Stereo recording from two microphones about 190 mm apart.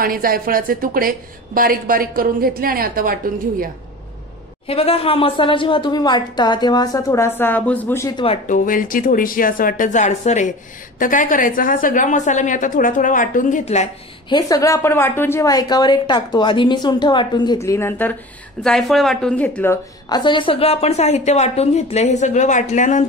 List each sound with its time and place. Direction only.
0.0 s a woman's voice: 50° right (ahead or behind)
4.6 s a woman's voice: 30° left (ahead or behind); by 8.1 s 10° left (ahead or behind)
8.5 s a woman's voice: 45° left (ahead or behind)
14.3 s a woman's voice: 20° left (ahead or behind); by 23.0 s 40° left (ahead or behind)